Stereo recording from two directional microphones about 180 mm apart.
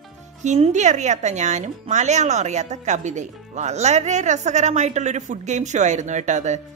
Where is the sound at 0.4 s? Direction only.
40° right (ahead or behind).